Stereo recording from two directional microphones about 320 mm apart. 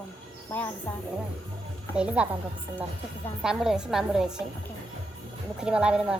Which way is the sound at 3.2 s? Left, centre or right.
Centre.